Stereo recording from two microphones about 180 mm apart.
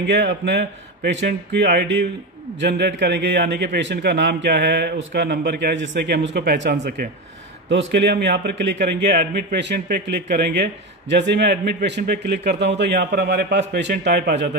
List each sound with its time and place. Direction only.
0.0 s a man's voice: 70° right (ahead or behind)
7.7 s a man's voice: 70° right (ahead or behind)